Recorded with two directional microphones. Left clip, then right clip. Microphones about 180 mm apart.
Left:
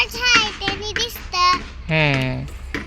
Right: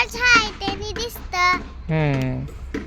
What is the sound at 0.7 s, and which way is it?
Child singing, 15° right (ahead or behind).